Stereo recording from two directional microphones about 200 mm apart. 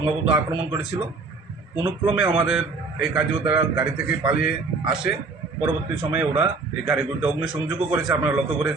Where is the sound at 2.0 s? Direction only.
5° right (ahead or behind).